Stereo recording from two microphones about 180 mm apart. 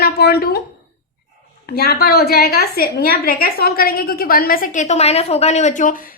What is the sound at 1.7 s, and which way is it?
A woman's voice, 60° left (ahead or behind).